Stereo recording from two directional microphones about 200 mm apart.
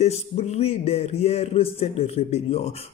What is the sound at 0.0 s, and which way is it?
A man's voice, 30° left (ahead or behind).